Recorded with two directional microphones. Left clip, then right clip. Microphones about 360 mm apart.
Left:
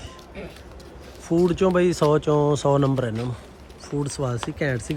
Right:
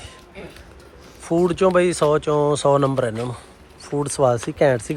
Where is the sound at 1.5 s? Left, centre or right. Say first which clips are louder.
Right 4 dB; centre.